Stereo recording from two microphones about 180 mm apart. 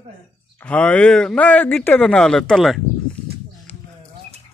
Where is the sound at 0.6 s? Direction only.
10° left (ahead or behind).